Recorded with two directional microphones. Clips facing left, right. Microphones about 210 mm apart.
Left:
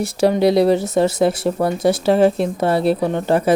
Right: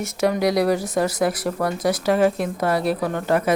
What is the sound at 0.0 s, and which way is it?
Speech, 30° left (ahead or behind).